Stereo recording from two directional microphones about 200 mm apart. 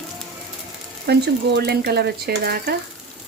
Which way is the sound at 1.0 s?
55° right (ahead or behind).